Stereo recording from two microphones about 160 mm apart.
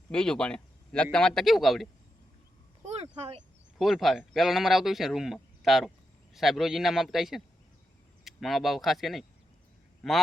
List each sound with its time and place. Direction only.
0.1 s speech: 5° left (ahead or behind)
2.8 s a sound: 40° right (ahead or behind)
3.8 s speech: centre (ahead or behind)